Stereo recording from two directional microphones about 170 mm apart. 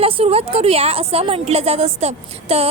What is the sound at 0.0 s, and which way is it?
A woman's voice, 35° right (ahead or behind).